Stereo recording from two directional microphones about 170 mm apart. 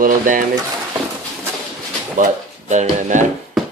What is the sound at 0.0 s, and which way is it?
Speech, 55° right (ahead or behind).